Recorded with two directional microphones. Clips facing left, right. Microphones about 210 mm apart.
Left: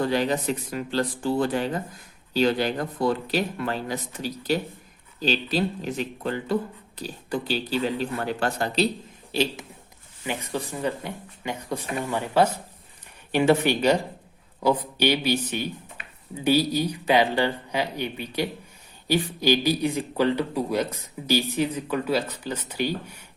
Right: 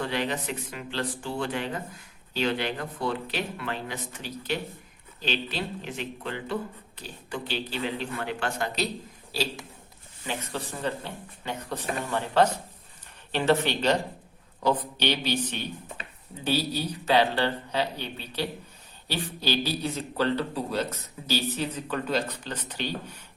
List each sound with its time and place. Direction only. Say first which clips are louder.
0.0 s speech: left 6 dB; 40° left (ahead or behind)
9.3 s a man's voice: left 6 dB; 20° left (ahead or behind)